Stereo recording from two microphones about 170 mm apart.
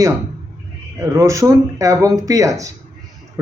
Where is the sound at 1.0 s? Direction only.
20° right (ahead or behind).